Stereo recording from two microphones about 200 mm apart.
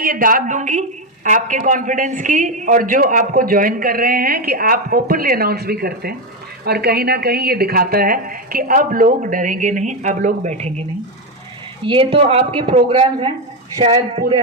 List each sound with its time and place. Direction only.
0.0 s a woman's voice: 45° right (ahead or behind)
11.9 s speech: 25° right (ahead or behind)